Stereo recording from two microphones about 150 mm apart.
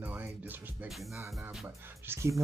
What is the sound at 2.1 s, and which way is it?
Speech, 20° right (ahead or behind).